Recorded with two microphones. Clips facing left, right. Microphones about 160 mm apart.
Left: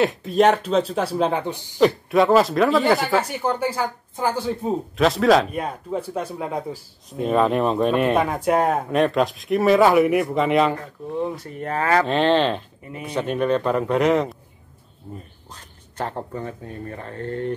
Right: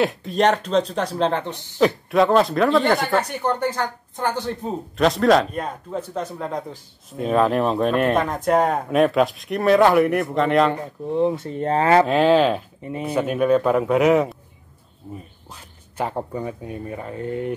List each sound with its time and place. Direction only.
0.0 s speech: centre (ahead or behind)
11.1 s speech: 20° right (ahead or behind)
12.1 s speech: 5° right (ahead or behind)
12.8 s speech: 25° right (ahead or behind)
13.1 s speech: 5° right (ahead or behind)
15.5 s speech: 10° right (ahead or behind)